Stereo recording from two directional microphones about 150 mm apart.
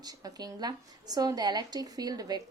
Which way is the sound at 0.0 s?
25° right (ahead or behind).